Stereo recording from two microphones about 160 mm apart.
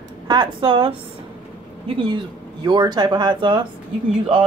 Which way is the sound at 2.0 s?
30° right (ahead or behind).